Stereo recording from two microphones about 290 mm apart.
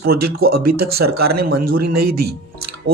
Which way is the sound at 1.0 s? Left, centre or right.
Right.